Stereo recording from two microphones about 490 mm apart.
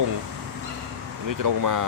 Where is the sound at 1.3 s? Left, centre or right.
Right.